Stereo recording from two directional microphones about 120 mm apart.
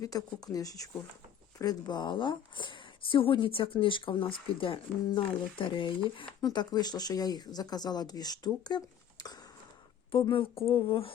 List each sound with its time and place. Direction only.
0.0 s a woman's voice: 30° left (ahead or behind)